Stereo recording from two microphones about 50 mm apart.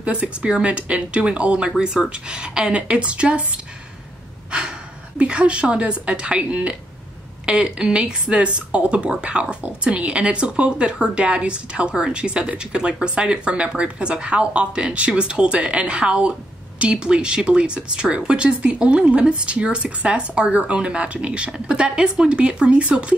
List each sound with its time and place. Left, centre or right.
0.0 s speech: right
4.5 s a woman's voice: right